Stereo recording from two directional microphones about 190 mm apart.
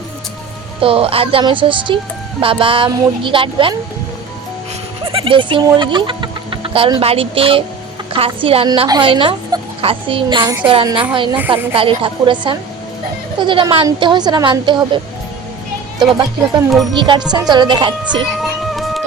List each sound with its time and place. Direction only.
0.8 s a woman's voice: 30° right (ahead or behind)
5.0 s a woman's voice: 30° right (ahead or behind)
18.6 s music: centre (ahead or behind)